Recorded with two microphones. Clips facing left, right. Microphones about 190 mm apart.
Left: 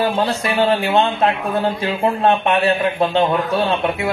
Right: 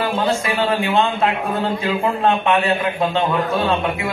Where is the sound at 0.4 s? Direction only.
35° left (ahead or behind).